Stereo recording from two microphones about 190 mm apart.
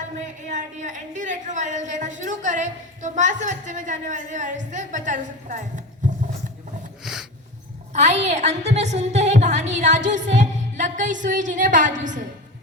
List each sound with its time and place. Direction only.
0.5 s a woman's voice: 40° right (ahead or behind)
7.0 s dog: 5° right (ahead or behind)
7.9 s a woman's voice: 35° right (ahead or behind)